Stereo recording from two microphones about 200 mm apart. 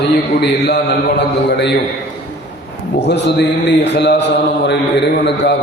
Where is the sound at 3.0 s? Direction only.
60° left (ahead or behind).